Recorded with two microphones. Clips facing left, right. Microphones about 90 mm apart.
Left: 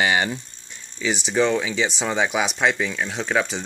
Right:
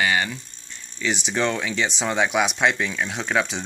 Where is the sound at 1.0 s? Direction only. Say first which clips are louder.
Left 3 dB; centre (ahead or behind).